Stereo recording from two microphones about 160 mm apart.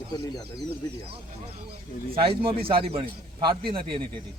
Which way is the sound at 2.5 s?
35° right (ahead or behind).